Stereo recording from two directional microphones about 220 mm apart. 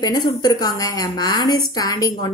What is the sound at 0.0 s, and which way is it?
Speech, 20° left (ahead or behind).